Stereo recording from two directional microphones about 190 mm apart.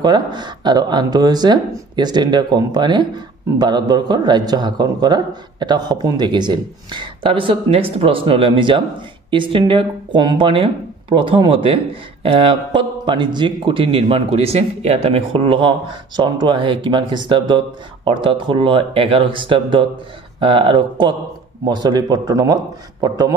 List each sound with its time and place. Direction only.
0.0 s speech: 20° right (ahead or behind)